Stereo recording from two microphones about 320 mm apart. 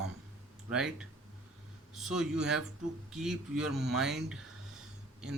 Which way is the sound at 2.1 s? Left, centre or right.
Centre.